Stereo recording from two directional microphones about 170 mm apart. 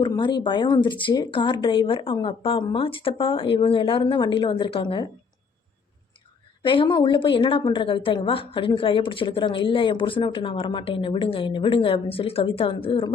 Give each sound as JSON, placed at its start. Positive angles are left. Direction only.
{"t": 0.0, "sound": "a woman's voice", "side_deg": 25}
{"t": 6.6, "sound": "a woman's voice", "side_deg": 30}